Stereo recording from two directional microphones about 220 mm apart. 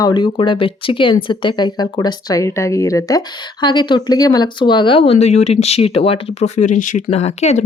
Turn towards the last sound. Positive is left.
turn(degrees=30)  # may be behind; listen again after turning